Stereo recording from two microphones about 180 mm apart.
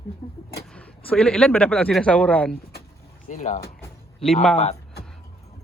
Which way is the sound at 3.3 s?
45° left (ahead or behind).